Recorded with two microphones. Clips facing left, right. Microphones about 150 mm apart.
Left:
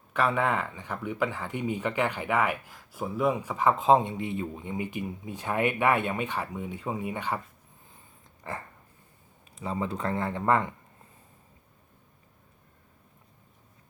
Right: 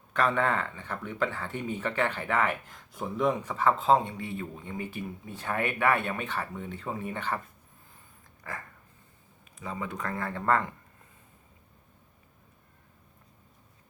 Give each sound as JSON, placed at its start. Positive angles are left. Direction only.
{"t": 0.1, "sound": "speech", "side_deg": 10}
{"t": 8.4, "sound": "speech", "side_deg": 25}